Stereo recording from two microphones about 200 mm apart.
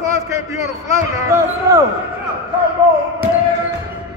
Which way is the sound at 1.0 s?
15° right (ahead or behind).